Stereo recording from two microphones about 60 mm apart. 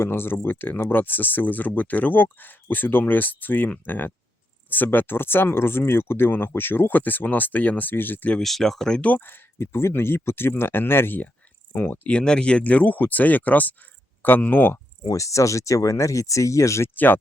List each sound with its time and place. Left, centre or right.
0.0 s speech: left
8.4 s speech: centre
9.0 s speech: left
12.0 s speech: centre; by 14.8 s left
15.1 s speech: left
16.9 s speech: left